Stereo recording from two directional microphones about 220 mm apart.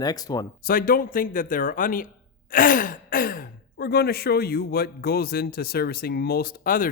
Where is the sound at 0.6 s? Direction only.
40° left (ahead or behind).